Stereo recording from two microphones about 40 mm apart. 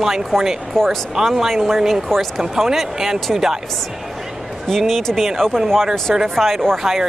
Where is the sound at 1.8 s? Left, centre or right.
Centre.